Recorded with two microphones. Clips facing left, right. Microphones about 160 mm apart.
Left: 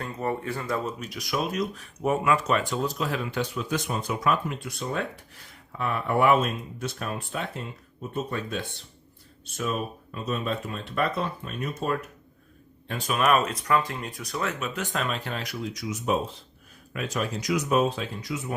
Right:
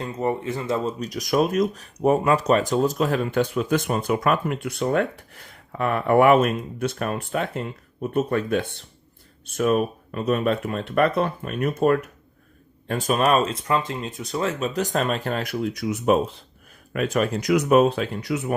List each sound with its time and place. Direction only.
0.0 s speech: 20° right (ahead or behind)
0.9 s speech: 40° right (ahead or behind); by 11.9 s 60° right (ahead or behind)
12.9 s speech: 45° right (ahead or behind); by 18.5 s 65° right (ahead or behind)